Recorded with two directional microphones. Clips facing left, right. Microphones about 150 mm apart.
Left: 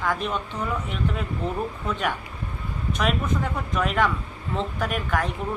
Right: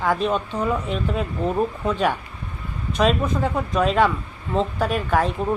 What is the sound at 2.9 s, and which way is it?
Speech, 25° right (ahead or behind).